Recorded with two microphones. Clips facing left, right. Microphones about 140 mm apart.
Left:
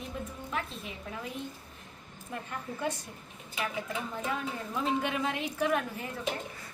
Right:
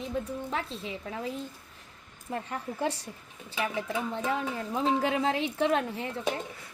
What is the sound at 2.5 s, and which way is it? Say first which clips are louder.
A woman's voice: right 2 dB; 30° right (ahead or behind).